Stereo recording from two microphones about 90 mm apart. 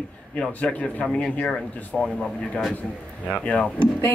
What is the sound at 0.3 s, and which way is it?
A woman's voice, 15° left (ahead or behind).